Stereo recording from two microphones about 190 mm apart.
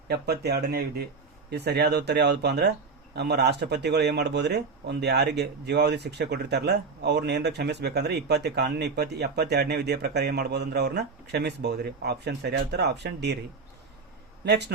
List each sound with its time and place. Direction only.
0.1 s speech: 60° right (ahead or behind)
14.4 s speech: 65° right (ahead or behind)